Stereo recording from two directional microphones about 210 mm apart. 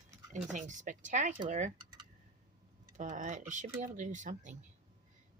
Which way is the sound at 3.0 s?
35° right (ahead or behind).